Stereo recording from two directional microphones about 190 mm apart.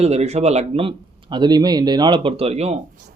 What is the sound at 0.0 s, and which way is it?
Speech, 35° right (ahead or behind).